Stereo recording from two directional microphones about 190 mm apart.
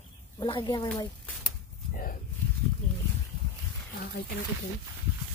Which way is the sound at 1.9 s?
45° left (ahead or behind).